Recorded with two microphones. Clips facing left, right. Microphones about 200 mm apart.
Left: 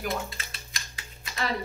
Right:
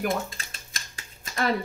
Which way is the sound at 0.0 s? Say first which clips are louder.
Right 4 dB; 45° right (ahead or behind).